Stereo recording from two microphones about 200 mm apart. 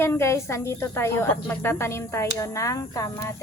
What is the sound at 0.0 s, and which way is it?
A woman's voice, 10° left (ahead or behind).